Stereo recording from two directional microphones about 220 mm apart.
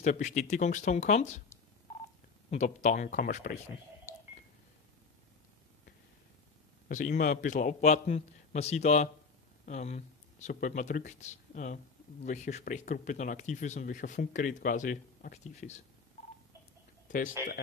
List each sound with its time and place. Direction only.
0.0 s speech: 35° left (ahead or behind)
2.5 s speech: 30° left (ahead or behind)
6.9 s speech: 35° left (ahead or behind)